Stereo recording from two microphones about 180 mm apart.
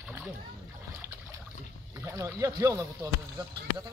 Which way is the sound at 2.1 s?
15° right (ahead or behind).